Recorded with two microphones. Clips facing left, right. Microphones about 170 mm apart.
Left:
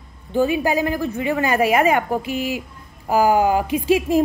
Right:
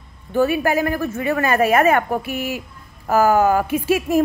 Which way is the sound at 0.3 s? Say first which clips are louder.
Right 1 dB; 15° left (ahead or behind).